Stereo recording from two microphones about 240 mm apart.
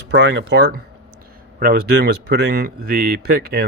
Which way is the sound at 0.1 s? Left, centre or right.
Right.